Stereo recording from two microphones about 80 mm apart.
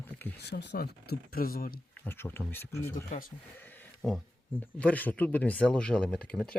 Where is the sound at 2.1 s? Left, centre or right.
Left.